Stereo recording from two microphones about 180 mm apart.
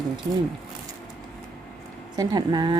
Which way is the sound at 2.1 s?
20° right (ahead or behind).